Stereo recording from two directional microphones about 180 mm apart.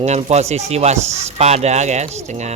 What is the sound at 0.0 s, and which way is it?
Speech, 35° right (ahead or behind).